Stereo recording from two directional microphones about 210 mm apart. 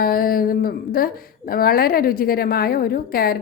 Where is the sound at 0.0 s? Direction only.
45° left (ahead or behind).